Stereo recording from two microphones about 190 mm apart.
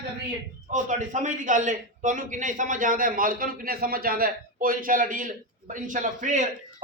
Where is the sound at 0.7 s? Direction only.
40° right (ahead or behind).